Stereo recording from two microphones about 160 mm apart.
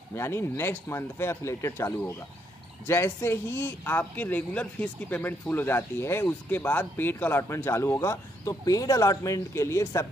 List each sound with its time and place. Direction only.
0.1 s speech: 15° left (ahead or behind)